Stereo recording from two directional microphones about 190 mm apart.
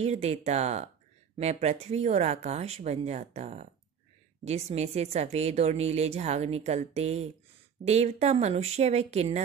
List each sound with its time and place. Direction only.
0.0 s a woman's voice: 35° right (ahead or behind)